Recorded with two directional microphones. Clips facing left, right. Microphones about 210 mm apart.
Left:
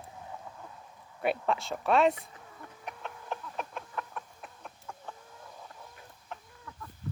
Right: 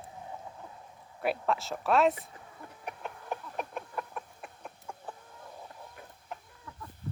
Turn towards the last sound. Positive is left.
turn(degrees=-10)  # may be behind; listen again after turning